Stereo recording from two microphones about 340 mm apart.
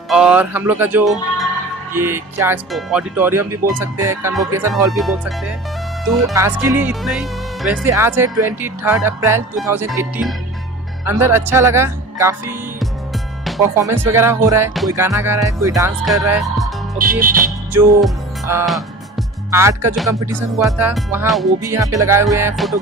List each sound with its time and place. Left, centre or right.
0.1 s speech: centre
6.2 s speech: centre
17.0 s music: right
17.7 s music: centre
19.5 s speech: centre